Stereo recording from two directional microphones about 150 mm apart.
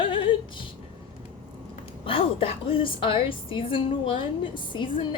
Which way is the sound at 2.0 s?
35° left (ahead or behind).